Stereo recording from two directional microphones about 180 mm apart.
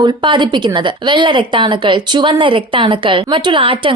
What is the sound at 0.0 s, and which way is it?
Speech, 25° right (ahead or behind).